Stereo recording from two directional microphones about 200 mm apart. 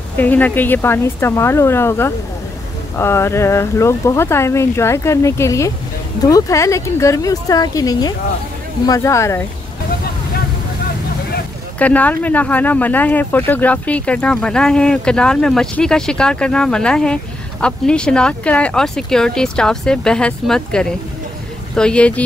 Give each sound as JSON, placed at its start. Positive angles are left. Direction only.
{"t": 0.2, "sound": "speech", "side_deg": 10}
{"t": 11.8, "sound": "speech", "side_deg": 10}